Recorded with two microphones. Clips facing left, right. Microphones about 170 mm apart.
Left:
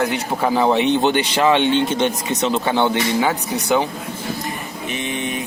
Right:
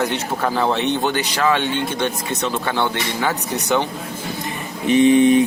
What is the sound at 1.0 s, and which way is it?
Speech, 25° left (ahead or behind).